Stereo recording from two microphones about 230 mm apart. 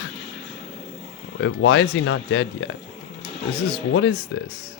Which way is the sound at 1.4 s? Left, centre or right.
Left.